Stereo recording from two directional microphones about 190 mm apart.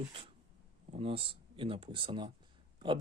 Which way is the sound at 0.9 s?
30° right (ahead or behind).